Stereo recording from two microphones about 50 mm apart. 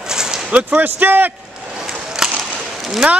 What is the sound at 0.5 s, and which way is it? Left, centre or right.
Speech, right.